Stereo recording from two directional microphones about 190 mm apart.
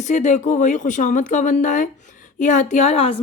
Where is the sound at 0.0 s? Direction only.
40° left (ahead or behind).